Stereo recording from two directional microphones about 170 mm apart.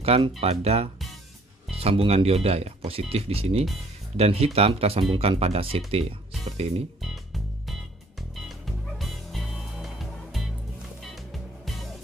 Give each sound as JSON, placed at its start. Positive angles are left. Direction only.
{"t": 0.0, "sound": "speech", "side_deg": -35}
{"t": 7.0, "sound": "music", "side_deg": 0}